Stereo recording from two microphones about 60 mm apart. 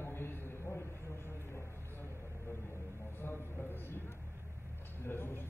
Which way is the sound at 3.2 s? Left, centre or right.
Left.